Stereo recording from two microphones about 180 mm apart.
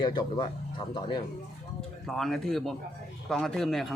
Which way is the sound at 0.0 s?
25° left (ahead or behind).